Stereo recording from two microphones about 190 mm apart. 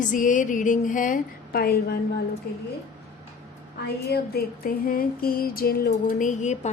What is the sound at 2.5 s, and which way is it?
Speech, 60° left (ahead or behind).